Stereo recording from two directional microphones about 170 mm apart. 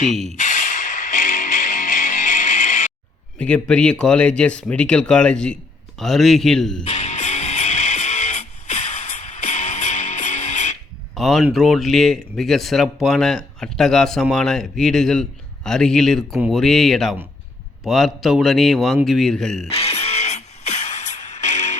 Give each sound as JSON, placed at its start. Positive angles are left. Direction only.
{"t": 0.3, "sound": "music", "side_deg": 50}
{"t": 3.3, "sound": "speech", "side_deg": 5}
{"t": 6.8, "sound": "music", "side_deg": 40}
{"t": 11.1, "sound": "speech", "side_deg": 0}
{"t": 19.6, "sound": "music", "side_deg": 35}